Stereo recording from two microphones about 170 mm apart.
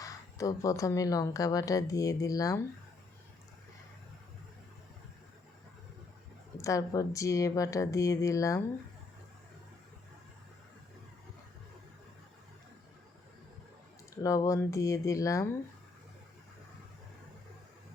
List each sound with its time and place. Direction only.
0.0 s speech: 20° left (ahead or behind)
6.6 s speech: 20° left (ahead or behind)
14.2 s speech: 20° left (ahead or behind)